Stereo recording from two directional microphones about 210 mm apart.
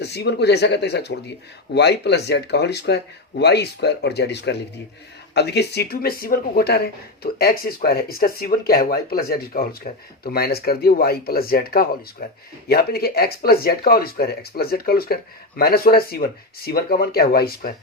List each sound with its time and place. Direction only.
0.0 s speech: 50° left (ahead or behind)